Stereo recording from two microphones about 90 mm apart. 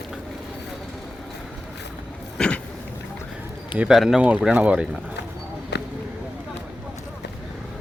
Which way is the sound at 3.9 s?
5° right (ahead or behind).